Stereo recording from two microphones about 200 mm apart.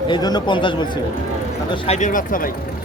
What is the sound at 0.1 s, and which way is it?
Speech, 20° left (ahead or behind).